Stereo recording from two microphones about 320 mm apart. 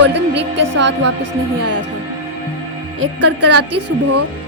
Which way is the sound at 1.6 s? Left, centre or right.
Right.